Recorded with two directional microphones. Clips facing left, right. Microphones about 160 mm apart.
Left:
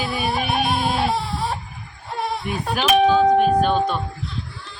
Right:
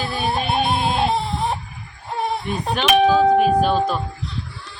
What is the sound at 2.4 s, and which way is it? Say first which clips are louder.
Speech: even; 5° left (ahead or behind).